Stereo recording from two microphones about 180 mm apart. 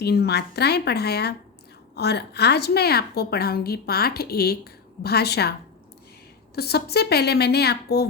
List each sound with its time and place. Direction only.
0.0 s a woman's voice: 60° left (ahead or behind)
6.6 s a woman's voice: 60° left (ahead or behind)